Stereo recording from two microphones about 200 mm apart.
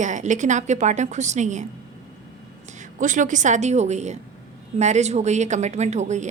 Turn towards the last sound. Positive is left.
turn(degrees=-35)  # may be behind; listen again after turning